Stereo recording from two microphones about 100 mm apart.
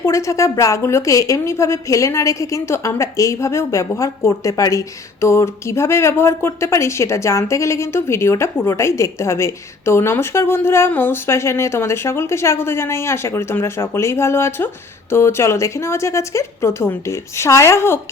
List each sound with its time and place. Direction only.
0.0 s a woman's voice: 30° left (ahead or behind)